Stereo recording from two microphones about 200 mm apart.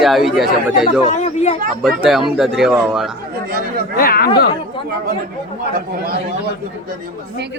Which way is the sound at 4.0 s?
45° left (ahead or behind).